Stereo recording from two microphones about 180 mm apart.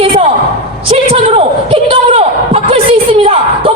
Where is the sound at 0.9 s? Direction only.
30° right (ahead or behind).